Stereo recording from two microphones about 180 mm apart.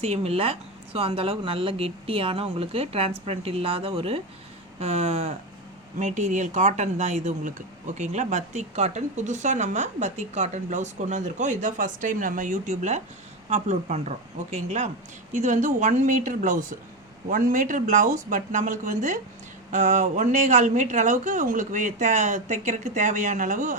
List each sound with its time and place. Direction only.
0.0 s speech: 35° right (ahead or behind)